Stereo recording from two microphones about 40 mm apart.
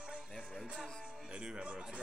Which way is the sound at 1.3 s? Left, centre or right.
Right.